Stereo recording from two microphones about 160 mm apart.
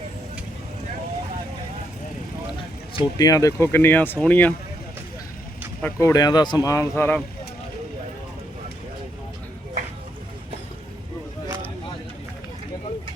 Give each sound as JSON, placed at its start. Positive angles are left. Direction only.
{"t": 2.9, "sound": "speech", "side_deg": 25}
{"t": 5.8, "sound": "speech", "side_deg": 15}